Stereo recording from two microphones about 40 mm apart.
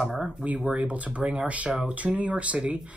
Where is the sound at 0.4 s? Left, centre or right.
Right.